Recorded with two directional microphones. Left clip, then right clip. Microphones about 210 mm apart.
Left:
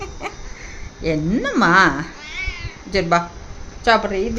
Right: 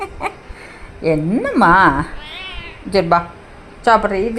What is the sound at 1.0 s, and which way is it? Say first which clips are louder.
Speech: right 4 dB; 10° right (ahead or behind).